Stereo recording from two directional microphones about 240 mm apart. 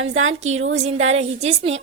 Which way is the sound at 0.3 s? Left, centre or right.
Right.